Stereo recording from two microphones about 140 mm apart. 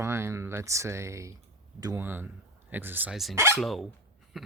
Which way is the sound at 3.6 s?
Centre (ahead or behind).